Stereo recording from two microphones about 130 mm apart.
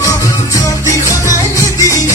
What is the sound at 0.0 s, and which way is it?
Music, 25° left (ahead or behind).